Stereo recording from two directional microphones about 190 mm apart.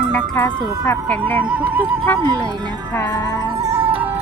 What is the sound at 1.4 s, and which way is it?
Music, 5° right (ahead or behind).